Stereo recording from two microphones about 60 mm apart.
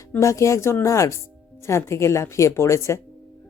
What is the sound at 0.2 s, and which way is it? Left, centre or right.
Speech, left.